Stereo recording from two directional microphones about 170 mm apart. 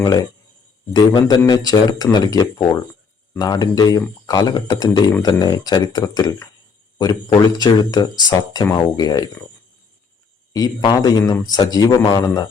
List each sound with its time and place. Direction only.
0.0 s speech: 20° left (ahead or behind)
10.5 s speech: 25° left (ahead or behind)